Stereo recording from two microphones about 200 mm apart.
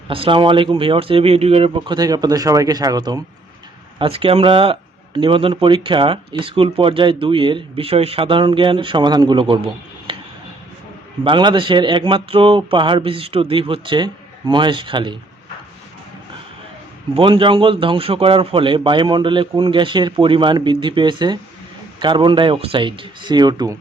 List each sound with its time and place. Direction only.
0.1 s speech: 25° right (ahead or behind)
11.2 s speech: 25° right (ahead or behind)
17.2 s speech: 25° right (ahead or behind)